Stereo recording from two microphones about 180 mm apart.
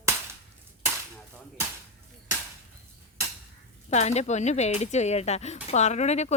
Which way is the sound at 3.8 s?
40° left (ahead or behind).